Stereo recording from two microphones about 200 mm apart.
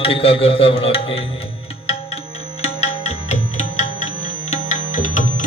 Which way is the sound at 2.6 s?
35° left (ahead or behind).